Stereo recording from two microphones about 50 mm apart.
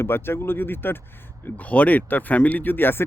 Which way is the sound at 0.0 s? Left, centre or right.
Left.